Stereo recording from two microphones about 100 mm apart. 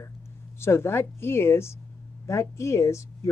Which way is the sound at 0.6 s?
25° left (ahead or behind).